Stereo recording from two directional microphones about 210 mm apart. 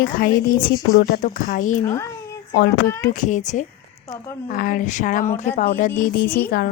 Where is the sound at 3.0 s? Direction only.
35° left (ahead or behind).